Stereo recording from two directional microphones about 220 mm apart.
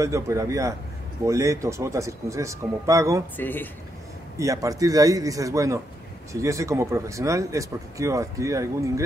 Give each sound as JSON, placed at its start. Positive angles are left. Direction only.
{"t": 0.0, "sound": "speech", "side_deg": -15}
{"t": 3.3, "sound": "speech", "side_deg": 10}
{"t": 4.4, "sound": "speech", "side_deg": -15}